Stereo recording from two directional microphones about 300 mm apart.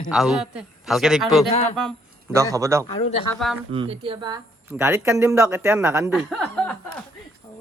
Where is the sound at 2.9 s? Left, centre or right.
Centre.